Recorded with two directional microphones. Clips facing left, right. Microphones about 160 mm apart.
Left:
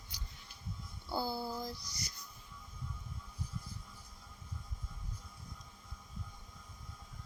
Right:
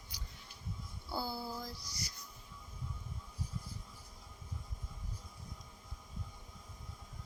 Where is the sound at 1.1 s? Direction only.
20° left (ahead or behind).